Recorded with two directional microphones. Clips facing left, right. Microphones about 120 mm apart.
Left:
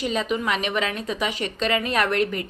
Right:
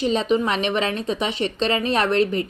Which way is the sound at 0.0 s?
30° right (ahead or behind).